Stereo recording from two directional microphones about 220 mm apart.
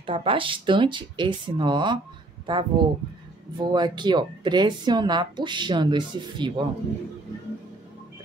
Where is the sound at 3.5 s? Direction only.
20° right (ahead or behind).